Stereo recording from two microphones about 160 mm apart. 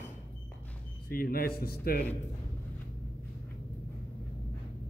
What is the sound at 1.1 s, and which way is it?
Speech, 65° left (ahead or behind).